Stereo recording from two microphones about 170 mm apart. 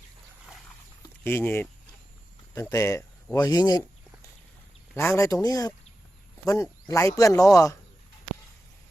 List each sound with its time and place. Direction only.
1.2 s speech: 15° left (ahead or behind)
3.3 s a sound: 20° left (ahead or behind)
4.9 s speech: 15° left (ahead or behind)